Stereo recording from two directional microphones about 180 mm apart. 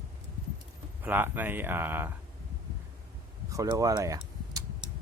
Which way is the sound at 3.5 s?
20° right (ahead or behind).